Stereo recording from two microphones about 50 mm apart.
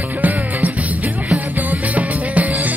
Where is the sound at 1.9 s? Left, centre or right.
Right.